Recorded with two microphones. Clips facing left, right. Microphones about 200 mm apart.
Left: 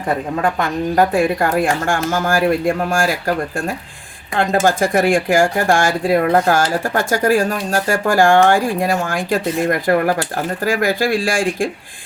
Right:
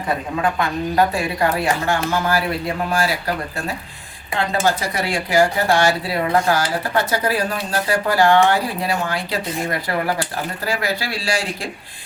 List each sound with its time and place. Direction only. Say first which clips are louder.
0.9 s speech: left 4 dB; 50° left (ahead or behind)